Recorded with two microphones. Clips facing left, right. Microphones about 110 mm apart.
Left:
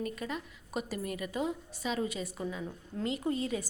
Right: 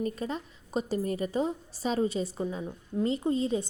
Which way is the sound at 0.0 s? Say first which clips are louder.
Right 4 dB; 30° right (ahead or behind).